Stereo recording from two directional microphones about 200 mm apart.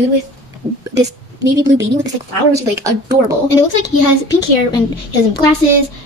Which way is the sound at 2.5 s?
15° right (ahead or behind).